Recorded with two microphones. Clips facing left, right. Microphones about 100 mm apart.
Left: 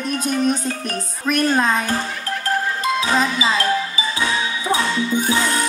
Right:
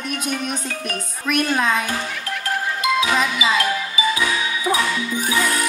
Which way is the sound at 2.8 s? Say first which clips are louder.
Right 1 dB; 35° left (ahead or behind).